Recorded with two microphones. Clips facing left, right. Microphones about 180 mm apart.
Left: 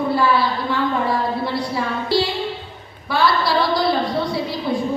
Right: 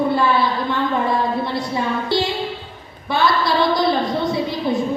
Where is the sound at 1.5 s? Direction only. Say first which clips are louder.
Right 1 dB; 20° right (ahead or behind).